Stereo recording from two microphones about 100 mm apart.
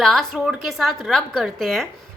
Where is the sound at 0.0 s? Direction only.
5° left (ahead or behind).